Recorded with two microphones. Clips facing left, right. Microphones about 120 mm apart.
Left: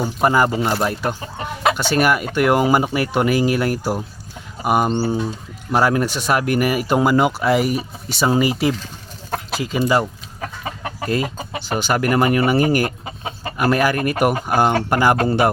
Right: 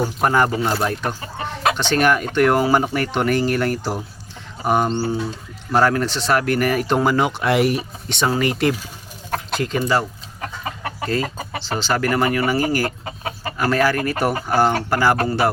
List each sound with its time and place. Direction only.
0.0 s speech: 5° left (ahead or behind)